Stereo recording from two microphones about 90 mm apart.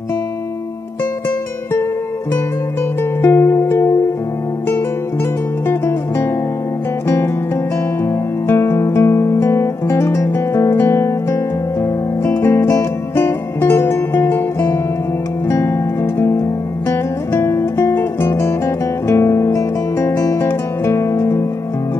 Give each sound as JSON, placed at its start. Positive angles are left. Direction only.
{"t": 3.0, "sound": "music", "side_deg": 25}
{"t": 5.7, "sound": "music", "side_deg": 30}
{"t": 8.0, "sound": "guitar", "side_deg": 25}
{"t": 11.8, "sound": "music", "side_deg": 30}